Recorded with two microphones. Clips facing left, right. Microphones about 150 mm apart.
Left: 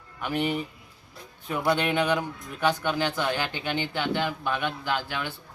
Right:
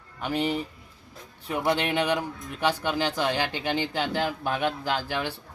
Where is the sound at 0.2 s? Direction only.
35° right (ahead or behind).